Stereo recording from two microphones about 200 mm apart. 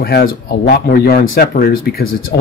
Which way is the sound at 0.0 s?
50° left (ahead or behind).